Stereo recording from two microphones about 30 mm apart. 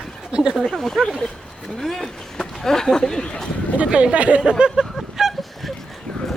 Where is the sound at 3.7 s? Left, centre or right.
Right.